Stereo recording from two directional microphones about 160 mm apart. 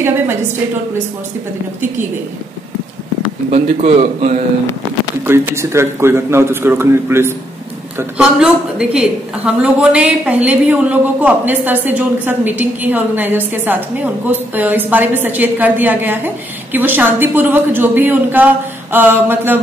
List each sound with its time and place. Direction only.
3.4 s a man's voice: 45° right (ahead or behind)
5.2 s a woman's voice: 15° right (ahead or behind)
8.2 s a woman's voice: 5° right (ahead or behind)